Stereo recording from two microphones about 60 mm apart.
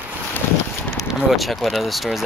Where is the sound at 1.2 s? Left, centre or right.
Centre.